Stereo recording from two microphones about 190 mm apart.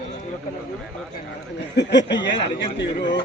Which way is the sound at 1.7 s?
65° left (ahead or behind).